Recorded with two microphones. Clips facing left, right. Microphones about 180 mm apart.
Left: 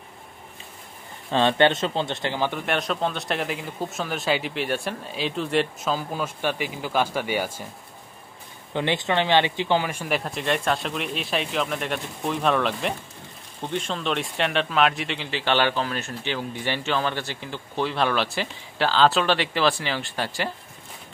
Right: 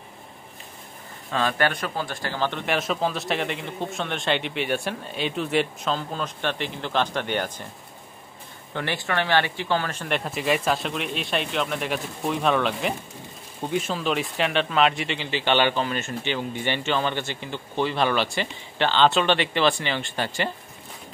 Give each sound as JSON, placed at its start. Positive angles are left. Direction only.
{"t": 1.3, "sound": "speech", "side_deg": 30}
{"t": 2.6, "sound": "speech", "side_deg": 0}
{"t": 8.7, "sound": "speech", "side_deg": 20}